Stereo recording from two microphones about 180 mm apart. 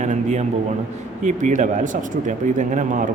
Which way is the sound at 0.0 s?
40° right (ahead or behind).